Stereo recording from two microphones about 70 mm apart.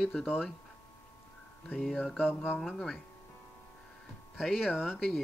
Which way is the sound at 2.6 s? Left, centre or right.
Centre.